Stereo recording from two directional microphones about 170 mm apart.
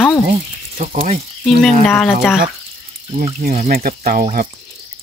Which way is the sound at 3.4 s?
60° right (ahead or behind).